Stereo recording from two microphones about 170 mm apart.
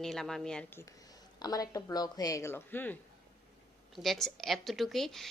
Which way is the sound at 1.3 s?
20° left (ahead or behind).